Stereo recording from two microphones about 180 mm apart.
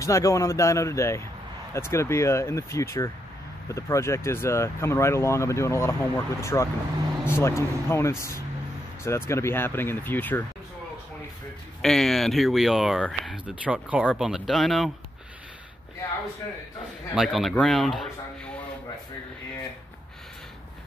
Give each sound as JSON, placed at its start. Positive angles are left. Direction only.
{"t": 0.0, "sound": "speech", "side_deg": 15}
{"t": 11.8, "sound": "speech", "side_deg": 0}
{"t": 17.1, "sound": "speech", "side_deg": 0}